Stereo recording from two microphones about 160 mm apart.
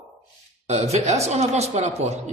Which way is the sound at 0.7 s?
40° right (ahead or behind).